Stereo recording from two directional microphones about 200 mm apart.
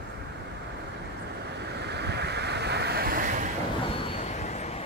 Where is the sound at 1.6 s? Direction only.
55° right (ahead or behind).